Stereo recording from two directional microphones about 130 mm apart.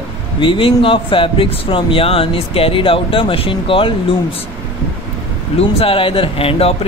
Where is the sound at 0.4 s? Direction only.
40° left (ahead or behind).